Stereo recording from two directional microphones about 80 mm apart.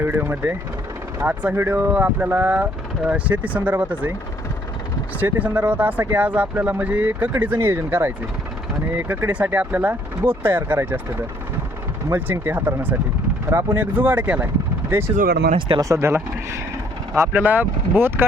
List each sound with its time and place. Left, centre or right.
0.0 s speech: right
1.5 s speech: right
5.2 s speech: right
12.1 s speech: right